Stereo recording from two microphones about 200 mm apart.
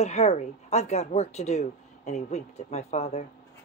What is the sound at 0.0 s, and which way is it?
A woman's voice, 30° left (ahead or behind).